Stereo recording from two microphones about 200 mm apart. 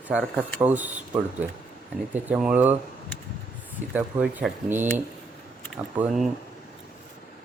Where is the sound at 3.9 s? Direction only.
5° right (ahead or behind).